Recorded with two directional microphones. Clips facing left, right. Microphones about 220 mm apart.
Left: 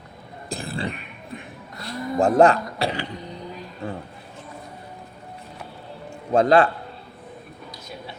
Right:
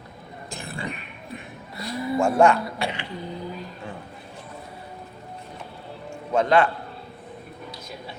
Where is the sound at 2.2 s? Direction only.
35° left (ahead or behind).